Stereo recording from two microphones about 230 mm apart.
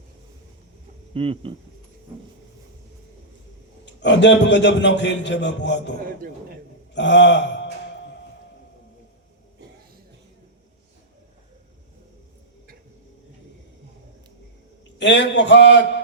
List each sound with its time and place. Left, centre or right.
1.1 s speech: right
3.8 s a man's voice: left
6.9 s a sound: left
14.9 s a man's voice: left